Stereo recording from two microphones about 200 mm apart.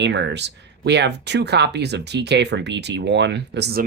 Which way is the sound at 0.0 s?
60° right (ahead or behind).